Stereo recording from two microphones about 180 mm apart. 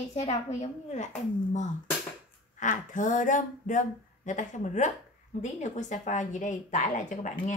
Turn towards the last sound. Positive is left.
turn(degrees=45)  # may be behind; listen again after turning